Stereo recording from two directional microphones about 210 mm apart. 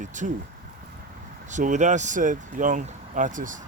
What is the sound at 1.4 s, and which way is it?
Speech, 35° right (ahead or behind).